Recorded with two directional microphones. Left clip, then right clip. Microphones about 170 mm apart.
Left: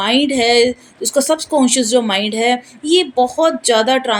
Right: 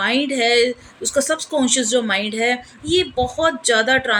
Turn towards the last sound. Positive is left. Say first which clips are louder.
# left 2 dB
turn(degrees=15)  # may be behind; listen again after turning